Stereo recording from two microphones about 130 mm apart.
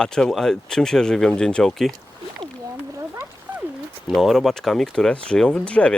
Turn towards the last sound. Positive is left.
turn(degrees=10)  # may be behind; listen again after turning